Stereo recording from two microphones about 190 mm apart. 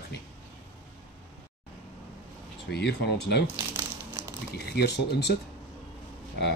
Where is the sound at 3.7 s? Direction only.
10° right (ahead or behind).